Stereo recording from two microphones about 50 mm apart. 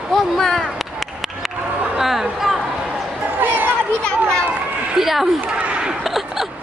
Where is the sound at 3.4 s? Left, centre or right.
Right.